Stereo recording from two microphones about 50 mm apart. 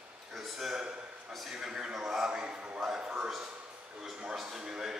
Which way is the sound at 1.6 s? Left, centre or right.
Centre.